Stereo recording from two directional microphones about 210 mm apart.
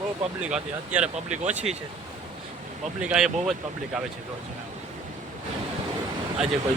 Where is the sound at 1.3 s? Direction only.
35° right (ahead or behind).